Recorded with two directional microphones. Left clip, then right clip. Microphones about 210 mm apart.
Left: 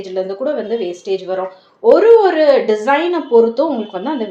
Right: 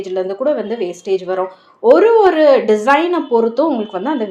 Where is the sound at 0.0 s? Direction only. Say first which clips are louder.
Right 2 dB; 30° right (ahead or behind).